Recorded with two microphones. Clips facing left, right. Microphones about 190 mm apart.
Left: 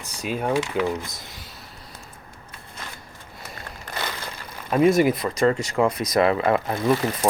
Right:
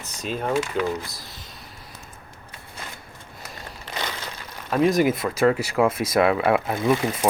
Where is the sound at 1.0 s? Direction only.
20° left (ahead or behind).